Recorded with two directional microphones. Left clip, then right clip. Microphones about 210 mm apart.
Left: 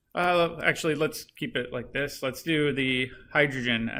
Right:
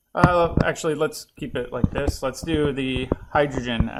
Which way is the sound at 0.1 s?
15° right (ahead or behind).